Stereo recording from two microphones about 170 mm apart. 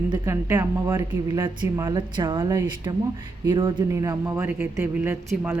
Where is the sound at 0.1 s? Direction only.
15° right (ahead or behind).